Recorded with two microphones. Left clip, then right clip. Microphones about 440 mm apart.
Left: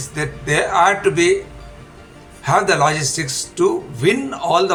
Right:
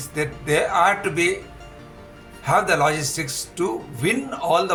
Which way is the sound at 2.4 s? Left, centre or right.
Right.